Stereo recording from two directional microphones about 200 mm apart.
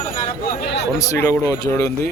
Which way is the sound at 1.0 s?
15° left (ahead or behind).